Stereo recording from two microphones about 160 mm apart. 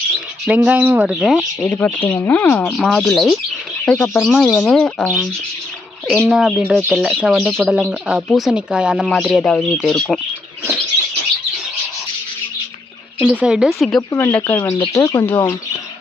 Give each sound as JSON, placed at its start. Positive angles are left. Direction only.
{"t": 0.4, "sound": "speech", "side_deg": -10}
{"t": 13.1, "sound": "speech", "side_deg": -10}
{"t": 14.1, "sound": "speech", "side_deg": 15}